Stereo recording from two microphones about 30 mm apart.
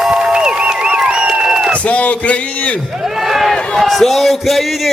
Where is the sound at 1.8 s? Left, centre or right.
Left.